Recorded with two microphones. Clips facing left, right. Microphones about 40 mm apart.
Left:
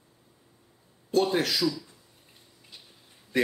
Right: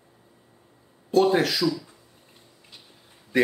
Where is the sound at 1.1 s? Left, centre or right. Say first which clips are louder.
Right 5 dB; centre.